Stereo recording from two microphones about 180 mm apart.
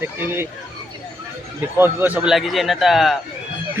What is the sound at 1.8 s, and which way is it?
Speech, 10° right (ahead or behind).